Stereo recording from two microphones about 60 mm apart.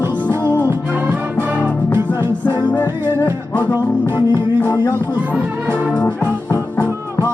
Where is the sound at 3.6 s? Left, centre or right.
Right.